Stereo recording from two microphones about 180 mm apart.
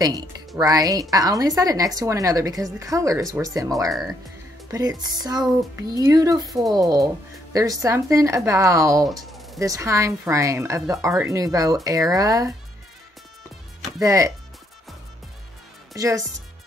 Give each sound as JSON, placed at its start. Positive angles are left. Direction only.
{"t": 0.0, "sound": "a woman's voice", "side_deg": -20}
{"t": 3.9, "sound": "speech", "side_deg": 0}
{"t": 4.6, "sound": "a woman's voice", "side_deg": -20}
{"t": 9.1, "sound": "a sound", "side_deg": 0}
{"t": 9.6, "sound": "speech", "side_deg": -15}
{"t": 13.9, "sound": "speech", "side_deg": -15}
{"t": 16.0, "sound": "a woman's voice", "side_deg": -20}